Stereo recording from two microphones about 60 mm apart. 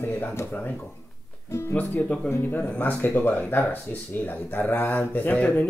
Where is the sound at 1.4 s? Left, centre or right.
Left.